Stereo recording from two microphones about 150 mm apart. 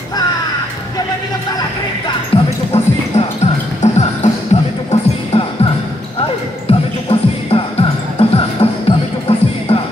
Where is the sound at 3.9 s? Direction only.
45° left (ahead or behind).